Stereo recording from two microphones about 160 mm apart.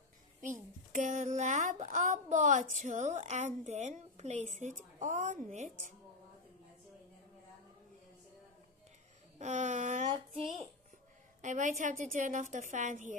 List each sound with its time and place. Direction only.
0.9 s a woman's voice: 50° right (ahead or behind)
9.4 s a sound: 45° right (ahead or behind)
11.4 s a woman's voice: 50° right (ahead or behind)